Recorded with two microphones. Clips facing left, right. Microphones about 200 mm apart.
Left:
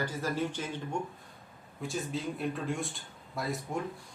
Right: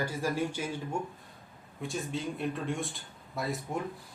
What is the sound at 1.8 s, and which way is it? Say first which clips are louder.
Speech: even; centre (ahead or behind).